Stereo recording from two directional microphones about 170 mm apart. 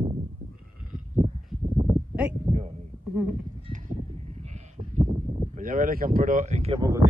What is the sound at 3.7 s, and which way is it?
Sheep, 45° right (ahead or behind).